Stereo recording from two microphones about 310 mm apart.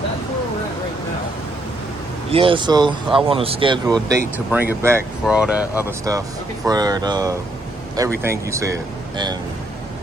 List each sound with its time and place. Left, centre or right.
2.3 s speech: centre